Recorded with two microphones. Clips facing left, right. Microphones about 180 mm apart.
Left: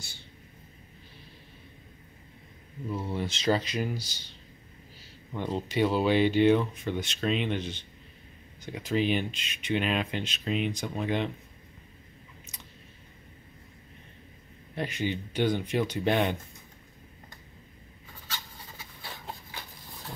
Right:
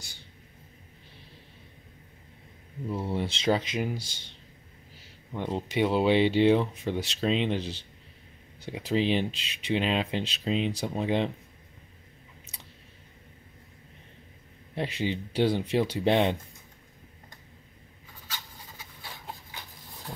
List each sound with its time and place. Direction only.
2.9 s speech: 25° right (ahead or behind)
5.3 s speech: 15° right (ahead or behind)
14.8 s speech: 30° right (ahead or behind)